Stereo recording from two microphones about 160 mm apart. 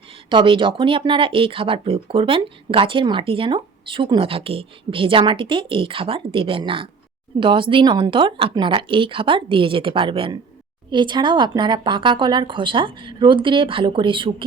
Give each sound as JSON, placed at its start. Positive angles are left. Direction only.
{"t": 0.3, "sound": "speech", "side_deg": -30}